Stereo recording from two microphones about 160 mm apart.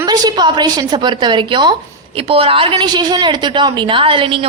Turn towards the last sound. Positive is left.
turn(degrees=-35)  # may be behind; listen again after turning